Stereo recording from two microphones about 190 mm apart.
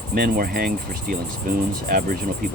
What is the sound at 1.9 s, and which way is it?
Speech, 50° right (ahead or behind).